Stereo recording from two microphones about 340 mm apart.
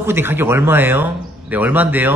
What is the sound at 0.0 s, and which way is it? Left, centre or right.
Speech, centre.